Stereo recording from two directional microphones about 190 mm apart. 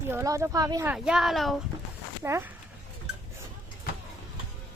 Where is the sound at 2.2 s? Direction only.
15° right (ahead or behind).